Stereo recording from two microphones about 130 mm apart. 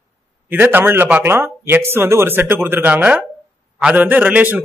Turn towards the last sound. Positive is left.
turn(degrees=-10)  # may be behind; listen again after turning